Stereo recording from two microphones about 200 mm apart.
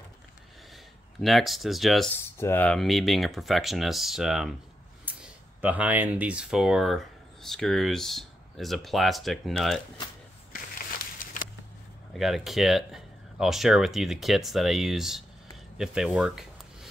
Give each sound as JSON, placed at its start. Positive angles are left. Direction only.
{"t": 1.2, "sound": "speech", "side_deg": 0}
{"t": 2.3, "sound": "speech", "side_deg": 10}
{"t": 11.2, "sound": "a sound", "side_deg": 45}
{"t": 12.1, "sound": "speech", "side_deg": 0}